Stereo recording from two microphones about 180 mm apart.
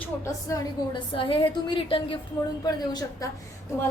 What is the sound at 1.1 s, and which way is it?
A woman's voice, 30° left (ahead or behind).